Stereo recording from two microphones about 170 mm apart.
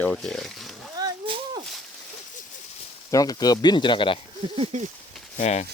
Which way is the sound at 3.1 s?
20° left (ahead or behind).